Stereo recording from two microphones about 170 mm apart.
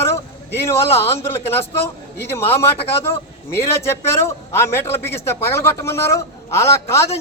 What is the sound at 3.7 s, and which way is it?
A man's voice, 15° left (ahead or behind).